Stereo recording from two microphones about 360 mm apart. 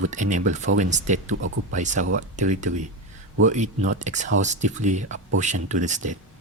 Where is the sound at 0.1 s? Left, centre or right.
Centre.